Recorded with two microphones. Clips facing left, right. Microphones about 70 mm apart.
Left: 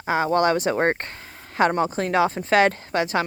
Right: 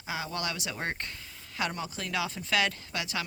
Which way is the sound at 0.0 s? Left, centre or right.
Left.